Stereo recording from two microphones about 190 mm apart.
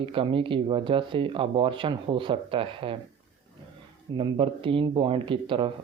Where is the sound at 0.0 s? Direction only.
30° right (ahead or behind).